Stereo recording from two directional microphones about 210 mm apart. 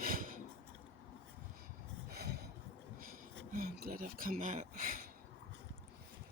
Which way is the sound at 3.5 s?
45° right (ahead or behind).